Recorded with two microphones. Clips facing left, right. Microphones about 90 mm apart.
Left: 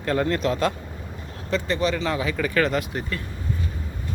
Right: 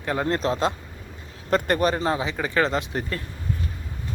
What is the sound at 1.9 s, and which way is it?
Speech, 35° right (ahead or behind).